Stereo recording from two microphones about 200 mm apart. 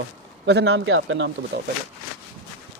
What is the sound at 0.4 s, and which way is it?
Speech, 60° right (ahead or behind).